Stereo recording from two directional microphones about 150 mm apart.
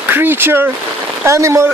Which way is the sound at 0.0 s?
15° right (ahead or behind).